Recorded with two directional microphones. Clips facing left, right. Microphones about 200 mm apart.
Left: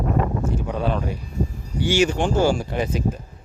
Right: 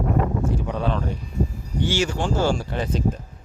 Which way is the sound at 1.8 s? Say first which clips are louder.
Left 4 dB; 15° left (ahead or behind).